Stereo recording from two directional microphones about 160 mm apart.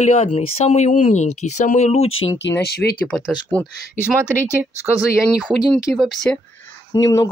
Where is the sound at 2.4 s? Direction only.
90° left.